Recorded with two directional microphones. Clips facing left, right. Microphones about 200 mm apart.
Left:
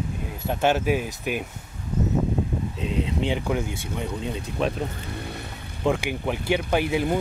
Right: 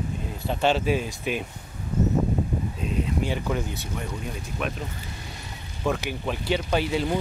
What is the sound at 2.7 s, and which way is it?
Speech, 90° left.